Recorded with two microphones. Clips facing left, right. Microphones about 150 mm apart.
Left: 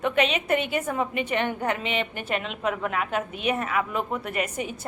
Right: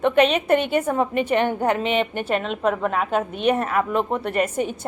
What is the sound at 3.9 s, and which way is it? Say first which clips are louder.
Speech: right 6 dB; 30° right (ahead or behind).